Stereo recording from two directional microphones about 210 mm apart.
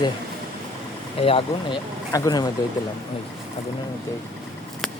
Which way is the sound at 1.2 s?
25° left (ahead or behind).